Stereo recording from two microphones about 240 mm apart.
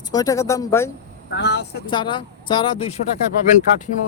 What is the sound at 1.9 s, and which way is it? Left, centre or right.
Speech, centre.